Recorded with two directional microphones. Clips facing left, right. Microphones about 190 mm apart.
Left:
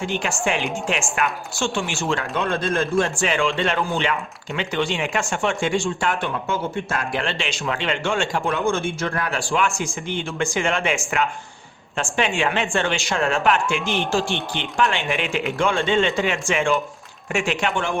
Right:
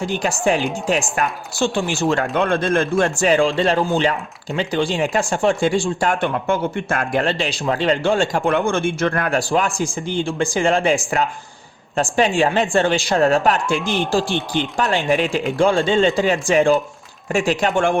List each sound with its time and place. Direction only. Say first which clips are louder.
0.0 s speech: right 4 dB; 35° right (ahead or behind)
2.3 s speech: right 5 dB; 55° right (ahead or behind); by 6.1 s 35° right (ahead or behind)
6.1 s speech: right 5 dB; 55° right (ahead or behind)
9.4 s speech: right 3 dB; 40° right (ahead or behind)